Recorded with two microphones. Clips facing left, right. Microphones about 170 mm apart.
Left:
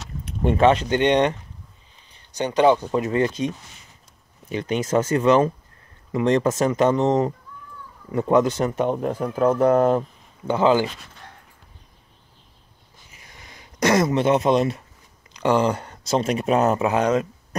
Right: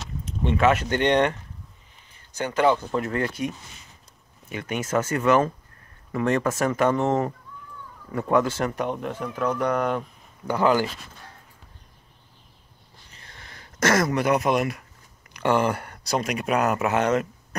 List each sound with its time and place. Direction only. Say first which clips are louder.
0.4 s speech: left 4 dB; 45° left (ahead or behind)
0.8 s speech: left 2 dB; 15° left (ahead or behind)
2.3 s speech: left 4 dB; 20° left (ahead or behind)
8.9 s speech: left 6 dB; 35° left (ahead or behind); by 10.9 s 20° left (ahead or behind)
13.1 s a sound: even; 10° left (ahead or behind)
15.3 s speech: left 2 dB; 20° left (ahead or behind)